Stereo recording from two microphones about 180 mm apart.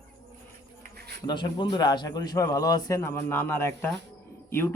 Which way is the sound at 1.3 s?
25° left (ahead or behind).